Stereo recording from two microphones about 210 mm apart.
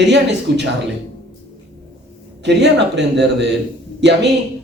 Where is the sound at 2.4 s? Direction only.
55° right (ahead or behind).